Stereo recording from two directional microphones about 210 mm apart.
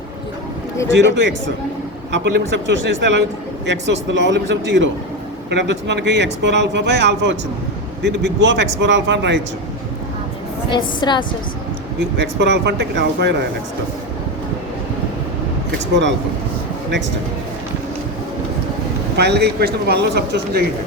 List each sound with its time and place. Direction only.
0.9 s speech: 55° right (ahead or behind)
10.7 s a woman's voice: 20° left (ahead or behind)
11.9 s speech: 55° right (ahead or behind)
19.1 s speech: 50° right (ahead or behind)